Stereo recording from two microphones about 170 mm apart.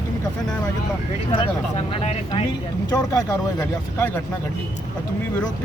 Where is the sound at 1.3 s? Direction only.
35° left (ahead or behind).